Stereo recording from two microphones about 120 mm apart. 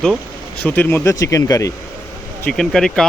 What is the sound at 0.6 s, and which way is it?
Speech, 15° left (ahead or behind).